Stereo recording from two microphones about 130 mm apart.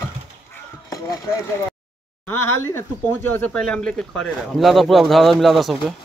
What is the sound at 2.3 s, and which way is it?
Speech, 20° left (ahead or behind).